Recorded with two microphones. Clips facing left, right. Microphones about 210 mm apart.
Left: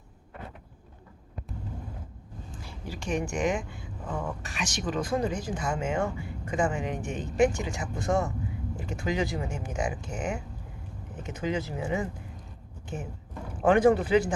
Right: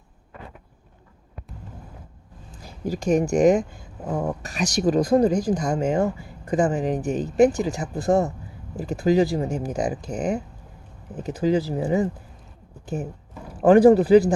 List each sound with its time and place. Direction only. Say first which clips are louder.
2.6 s speech: right 12 dB; 40° right (ahead or behind)
12.8 s a sound: right 8 dB; 35° right (ahead or behind)
13.5 s speech: right 7 dB; 35° right (ahead or behind)